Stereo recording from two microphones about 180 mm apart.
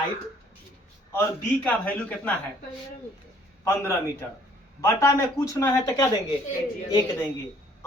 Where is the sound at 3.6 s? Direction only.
15° left (ahead or behind).